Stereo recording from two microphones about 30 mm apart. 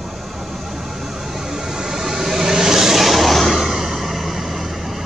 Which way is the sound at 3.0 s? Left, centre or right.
Centre.